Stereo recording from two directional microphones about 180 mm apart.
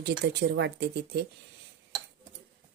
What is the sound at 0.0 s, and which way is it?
Speech, 65° right (ahead or behind).